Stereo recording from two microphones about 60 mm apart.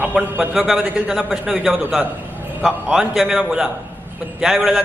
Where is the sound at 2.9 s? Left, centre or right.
Centre.